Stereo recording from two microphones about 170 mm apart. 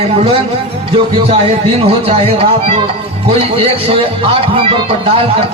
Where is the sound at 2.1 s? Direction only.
35° right (ahead or behind).